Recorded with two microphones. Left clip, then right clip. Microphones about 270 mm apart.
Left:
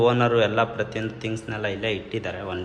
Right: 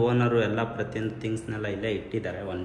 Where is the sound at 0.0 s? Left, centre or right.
Centre.